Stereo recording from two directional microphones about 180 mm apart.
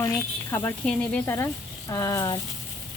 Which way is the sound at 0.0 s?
15° left (ahead or behind).